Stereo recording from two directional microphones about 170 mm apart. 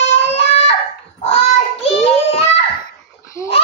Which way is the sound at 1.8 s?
35° left (ahead or behind).